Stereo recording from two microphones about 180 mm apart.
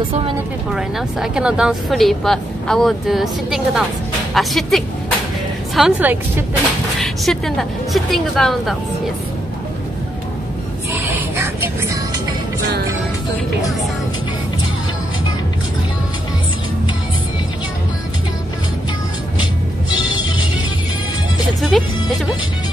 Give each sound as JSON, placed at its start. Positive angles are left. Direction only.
{"t": 0.7, "sound": "a woman's voice", "side_deg": -5}
{"t": 7.0, "sound": "a woman's voice", "side_deg": 0}
{"t": 10.9, "sound": "a sound", "side_deg": -15}
{"t": 19.9, "sound": "music", "side_deg": 25}
{"t": 21.5, "sound": "speech", "side_deg": 0}